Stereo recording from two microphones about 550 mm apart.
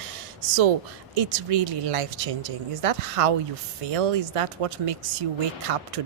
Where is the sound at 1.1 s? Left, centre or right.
Right.